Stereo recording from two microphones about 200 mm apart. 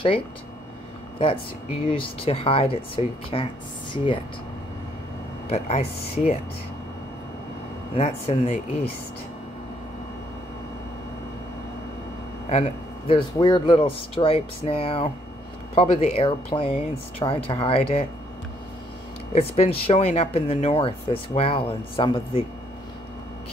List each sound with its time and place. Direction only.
1.9 s speech: 30° left (ahead or behind)
5.5 s speech: 30° left (ahead or behind)
7.9 s speech: 30° left (ahead or behind)
12.4 s speech: 30° left (ahead or behind)
19.3 s speech: 30° left (ahead or behind)